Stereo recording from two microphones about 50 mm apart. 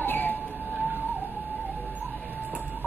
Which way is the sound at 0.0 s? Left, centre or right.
Left.